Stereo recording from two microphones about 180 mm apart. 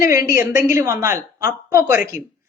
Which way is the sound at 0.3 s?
15° right (ahead or behind).